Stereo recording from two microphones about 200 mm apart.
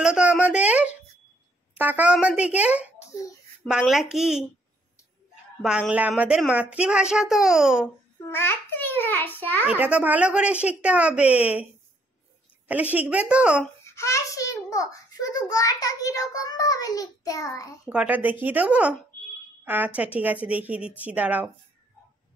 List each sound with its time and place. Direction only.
0.0 s a woman's voice: 5° right (ahead or behind)
5.6 s a woman's voice: 5° right (ahead or behind)
8.3 s a child's voice: 10° left (ahead or behind)
9.7 s speech: 5° right (ahead or behind)
12.6 s speech: 10° right (ahead or behind)
13.8 s a child's voice: 15° left (ahead or behind)
17.8 s speech: 5° right (ahead or behind)